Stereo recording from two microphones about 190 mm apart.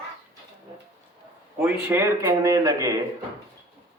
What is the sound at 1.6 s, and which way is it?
Speech, 10° right (ahead or behind).